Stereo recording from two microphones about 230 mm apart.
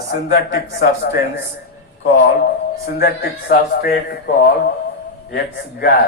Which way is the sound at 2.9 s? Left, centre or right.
Left.